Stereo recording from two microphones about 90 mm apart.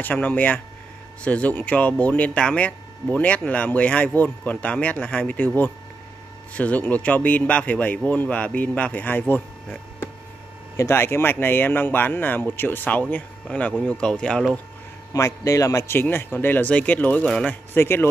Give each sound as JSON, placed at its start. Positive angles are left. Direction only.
{"t": 0.0, "sound": "speech", "side_deg": 15}
{"t": 6.5, "sound": "speech", "side_deg": 15}
{"t": 9.3, "sound": "a sound", "side_deg": 20}
{"t": 10.8, "sound": "speech", "side_deg": 25}
{"t": 15.1, "sound": "speech", "side_deg": 35}
{"t": 17.5, "sound": "speech", "side_deg": 25}